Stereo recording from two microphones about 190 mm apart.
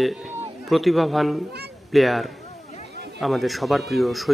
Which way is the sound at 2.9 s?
55° right (ahead or behind).